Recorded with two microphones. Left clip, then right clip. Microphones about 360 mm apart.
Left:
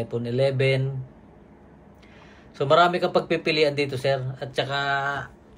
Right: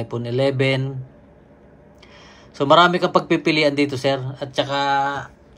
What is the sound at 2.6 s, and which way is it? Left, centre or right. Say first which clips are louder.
Speech: right 5 dB; centre.